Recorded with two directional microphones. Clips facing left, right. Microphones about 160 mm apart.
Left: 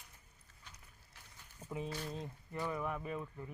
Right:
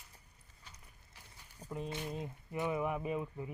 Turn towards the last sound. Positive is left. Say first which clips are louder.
# right 5 dB
turn(degrees=-15)  # may be behind; listen again after turning